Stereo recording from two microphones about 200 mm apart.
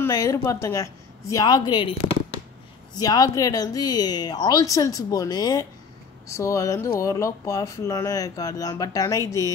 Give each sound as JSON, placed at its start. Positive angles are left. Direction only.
{"t": 0.0, "sound": "a woman's voice", "side_deg": 15}